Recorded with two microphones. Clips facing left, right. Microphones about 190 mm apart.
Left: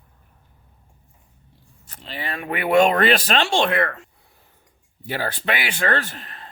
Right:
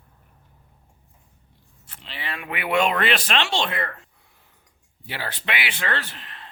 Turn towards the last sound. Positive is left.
turn(degrees=45)  # may be behind; listen again after turning